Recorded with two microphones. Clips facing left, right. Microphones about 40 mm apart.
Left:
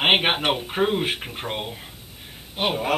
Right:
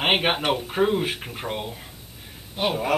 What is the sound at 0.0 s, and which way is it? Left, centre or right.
Speech, left.